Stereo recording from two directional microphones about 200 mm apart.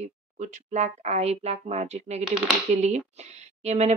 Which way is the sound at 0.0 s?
35° right (ahead or behind).